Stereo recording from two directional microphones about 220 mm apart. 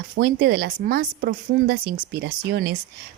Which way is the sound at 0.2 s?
45° right (ahead or behind).